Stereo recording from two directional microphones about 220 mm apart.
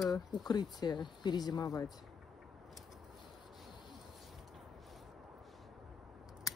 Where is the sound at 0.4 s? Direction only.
20° left (ahead or behind).